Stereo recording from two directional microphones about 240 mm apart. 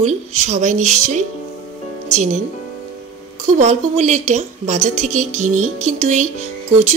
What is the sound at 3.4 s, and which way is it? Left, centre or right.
Speech, right.